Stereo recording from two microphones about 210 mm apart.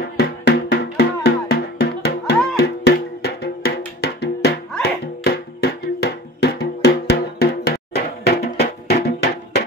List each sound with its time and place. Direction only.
0.0 s music: 50° left (ahead or behind)